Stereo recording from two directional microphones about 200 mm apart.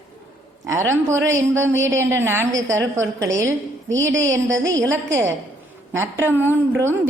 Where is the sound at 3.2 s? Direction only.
15° right (ahead or behind).